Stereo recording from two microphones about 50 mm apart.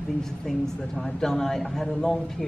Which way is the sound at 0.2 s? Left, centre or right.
Centre.